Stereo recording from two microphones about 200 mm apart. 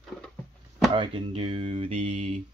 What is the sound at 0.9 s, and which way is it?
Speech, 25° right (ahead or behind).